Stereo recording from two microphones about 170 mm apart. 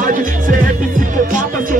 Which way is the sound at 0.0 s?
55° right (ahead or behind).